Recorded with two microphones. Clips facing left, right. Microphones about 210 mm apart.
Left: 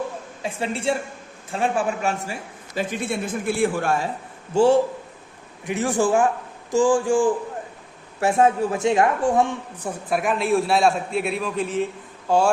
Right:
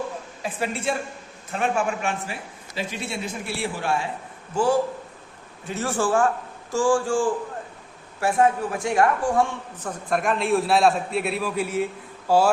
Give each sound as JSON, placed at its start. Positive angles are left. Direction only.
{"t": 0.4, "sound": "a woman's voice", "side_deg": 25}
{"t": 2.7, "sound": "a man's voice", "side_deg": 50}
{"t": 4.5, "sound": "a woman's voice", "side_deg": 25}
{"t": 5.6, "sound": "a woman's voice", "side_deg": 15}